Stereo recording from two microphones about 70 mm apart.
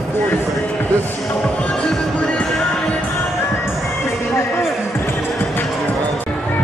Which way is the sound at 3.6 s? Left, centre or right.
Left.